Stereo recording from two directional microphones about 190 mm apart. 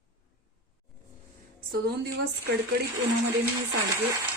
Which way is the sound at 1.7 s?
55° right (ahead or behind).